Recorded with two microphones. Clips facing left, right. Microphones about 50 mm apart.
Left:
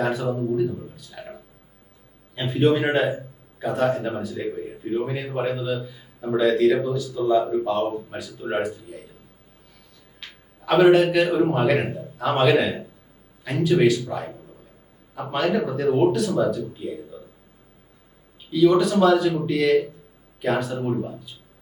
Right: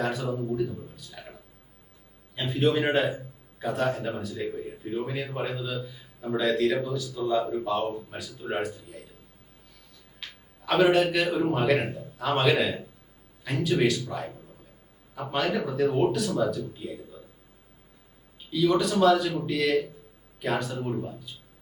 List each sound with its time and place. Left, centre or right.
0.0 s a man's voice: centre
10.2 s a man's voice: centre
18.5 s a man's voice: centre